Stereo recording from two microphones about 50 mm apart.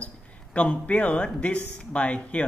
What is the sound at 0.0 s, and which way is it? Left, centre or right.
Speech, left.